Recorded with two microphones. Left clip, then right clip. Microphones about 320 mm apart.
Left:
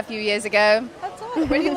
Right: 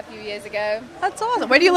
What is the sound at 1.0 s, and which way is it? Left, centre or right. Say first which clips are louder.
Speech: right 4 dB; right.